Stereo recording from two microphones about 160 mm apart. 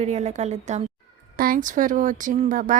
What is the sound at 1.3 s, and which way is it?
A woman's voice, 60° right (ahead or behind).